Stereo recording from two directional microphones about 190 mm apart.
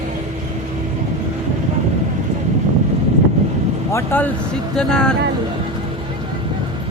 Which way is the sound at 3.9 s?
10° left (ahead or behind).